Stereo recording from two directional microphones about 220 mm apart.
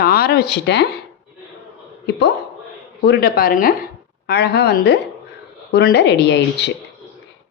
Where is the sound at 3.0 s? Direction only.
45° left (ahead or behind).